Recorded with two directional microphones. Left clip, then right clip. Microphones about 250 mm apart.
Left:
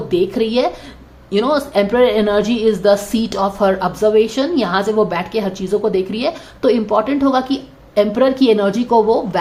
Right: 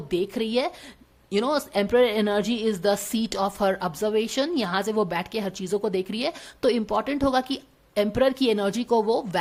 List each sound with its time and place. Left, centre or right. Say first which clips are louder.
0.1 s a woman's voice: left 9 dB; right